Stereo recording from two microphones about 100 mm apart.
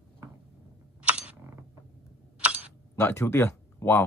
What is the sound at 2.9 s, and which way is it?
Speech, 25° left (ahead or behind).